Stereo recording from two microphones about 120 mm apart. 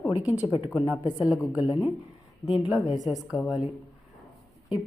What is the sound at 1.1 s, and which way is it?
A woman's voice, 5° right (ahead or behind).